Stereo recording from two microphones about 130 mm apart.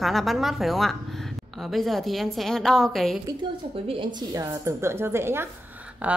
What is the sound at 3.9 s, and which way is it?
A woman's voice, 35° right (ahead or behind).